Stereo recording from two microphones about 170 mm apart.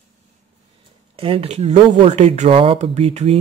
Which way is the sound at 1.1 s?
35° right (ahead or behind).